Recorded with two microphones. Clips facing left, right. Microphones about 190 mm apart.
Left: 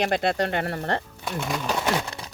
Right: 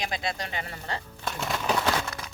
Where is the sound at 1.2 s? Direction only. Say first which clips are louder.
Even; centre (ahead or behind).